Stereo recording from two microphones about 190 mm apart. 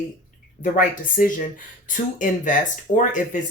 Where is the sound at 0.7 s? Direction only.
45° left (ahead or behind).